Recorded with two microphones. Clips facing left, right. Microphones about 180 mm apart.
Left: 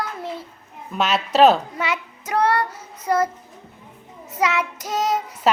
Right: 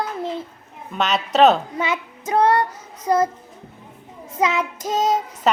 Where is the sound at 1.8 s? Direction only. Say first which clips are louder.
Right 2 dB; 25° right (ahead or behind).